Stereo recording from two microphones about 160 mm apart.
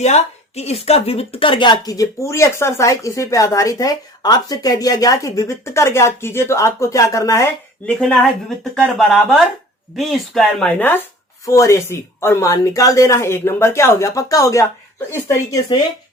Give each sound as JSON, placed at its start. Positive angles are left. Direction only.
{"t": 0.0, "sound": "a woman's voice", "side_deg": 45}
{"t": 7.9, "sound": "a woman's voice", "side_deg": 5}